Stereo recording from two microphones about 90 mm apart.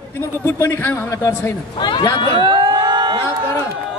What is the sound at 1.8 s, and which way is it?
Speech, 65° left (ahead or behind).